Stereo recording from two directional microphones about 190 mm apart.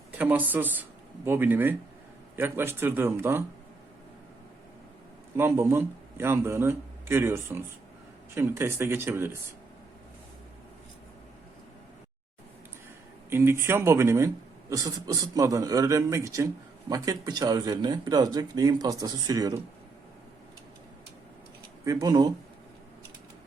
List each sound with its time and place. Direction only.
0.2 s a man's voice: 10° right (ahead or behind)
5.4 s a man's voice: 15° right (ahead or behind)
13.3 s a man's voice: 10° right (ahead or behind)
21.8 s speech: 20° right (ahead or behind)